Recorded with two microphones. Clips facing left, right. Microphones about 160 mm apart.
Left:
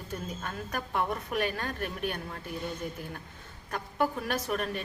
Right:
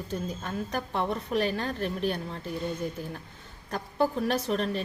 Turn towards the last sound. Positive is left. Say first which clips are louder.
# right 4 dB
turn(degrees=-30)  # may be behind; listen again after turning